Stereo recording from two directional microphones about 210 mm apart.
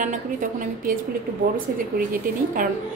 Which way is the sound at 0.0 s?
35° right (ahead or behind).